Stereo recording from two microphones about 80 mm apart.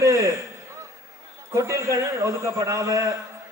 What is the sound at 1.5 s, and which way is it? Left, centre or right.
A man's voice, right.